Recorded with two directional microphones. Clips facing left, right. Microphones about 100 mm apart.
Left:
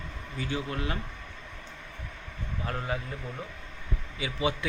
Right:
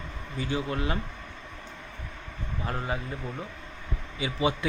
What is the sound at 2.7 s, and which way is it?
Speech, 20° right (ahead or behind).